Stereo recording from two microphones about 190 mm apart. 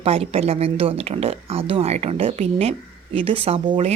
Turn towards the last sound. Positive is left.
turn(degrees=-30)  # may be behind; listen again after turning